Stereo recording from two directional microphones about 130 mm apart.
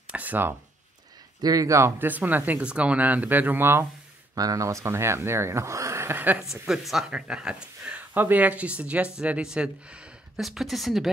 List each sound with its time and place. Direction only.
0.1 s a sound: 10° right (ahead or behind)
1.4 s speech: 30° right (ahead or behind)
4.4 s speech: 25° right (ahead or behind)
6.5 s speech: 5° right (ahead or behind)